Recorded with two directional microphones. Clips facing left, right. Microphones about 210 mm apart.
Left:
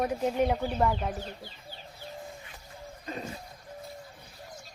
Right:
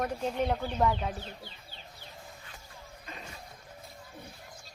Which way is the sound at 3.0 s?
40° left (ahead or behind).